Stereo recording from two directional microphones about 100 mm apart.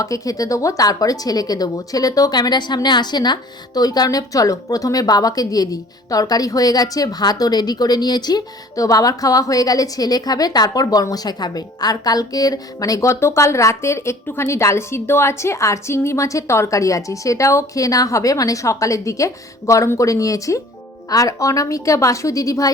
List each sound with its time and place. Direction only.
0.0 s a woman's voice: 35° left (ahead or behind)